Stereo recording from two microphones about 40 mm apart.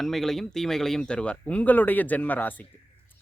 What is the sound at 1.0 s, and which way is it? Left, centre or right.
Speech, left.